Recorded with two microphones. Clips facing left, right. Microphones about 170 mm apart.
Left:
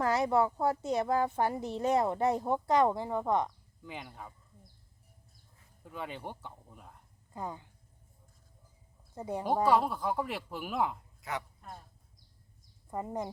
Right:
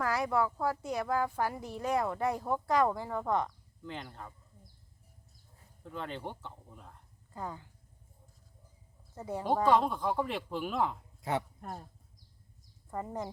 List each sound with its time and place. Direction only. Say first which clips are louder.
0.0 s speech: left 3 dB; 25° left (ahead or behind); by 4.4 s 5° left (ahead or behind)
5.8 s speech: right 1 dB; 10° left (ahead or behind)
9.1 s speech: even; 15° left (ahead or behind)
11.2 s speech: right 5 dB; 30° right (ahead or behind)
11.6 s speech: right 5 dB; 50° right (ahead or behind)
12.9 s speech: left 1 dB; 15° left (ahead or behind)